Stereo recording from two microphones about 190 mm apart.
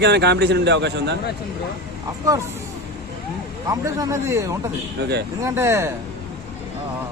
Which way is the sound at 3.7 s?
15° right (ahead or behind).